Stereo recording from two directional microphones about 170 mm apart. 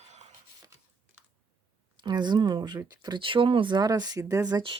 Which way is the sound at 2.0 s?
25° right (ahead or behind).